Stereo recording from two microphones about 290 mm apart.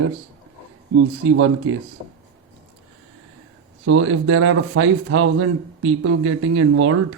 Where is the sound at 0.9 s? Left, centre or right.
Right.